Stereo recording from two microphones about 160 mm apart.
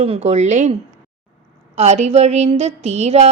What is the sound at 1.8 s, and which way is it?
Speech, 45° right (ahead or behind).